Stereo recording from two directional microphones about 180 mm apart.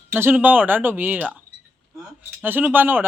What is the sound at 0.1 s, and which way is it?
Speech, 10° right (ahead or behind).